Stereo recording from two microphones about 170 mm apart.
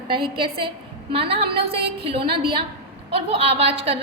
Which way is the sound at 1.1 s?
35° right (ahead or behind).